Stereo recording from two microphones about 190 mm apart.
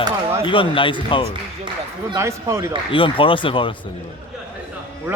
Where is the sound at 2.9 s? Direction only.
25° left (ahead or behind).